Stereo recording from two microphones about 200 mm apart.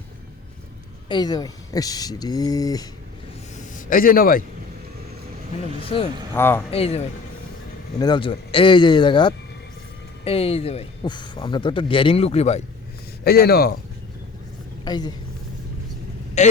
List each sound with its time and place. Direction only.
1.0 s a man's voice: 20° left (ahead or behind)
3.5 s a sound: 40° left (ahead or behind)
5.9 s a man's voice: 25° left (ahead or behind)
6.3 s speech: 10° left (ahead or behind)
6.7 s a man's voice: 30° left (ahead or behind)
13.2 s speech: 50° left (ahead or behind)
14.8 s speech: 20° left (ahead or behind)
16.4 s speech: 35° left (ahead or behind)